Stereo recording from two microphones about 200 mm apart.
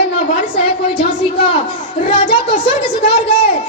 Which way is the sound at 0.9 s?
25° left (ahead or behind).